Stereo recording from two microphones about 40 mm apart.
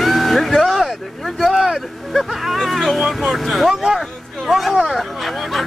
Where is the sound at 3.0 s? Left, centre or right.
Centre.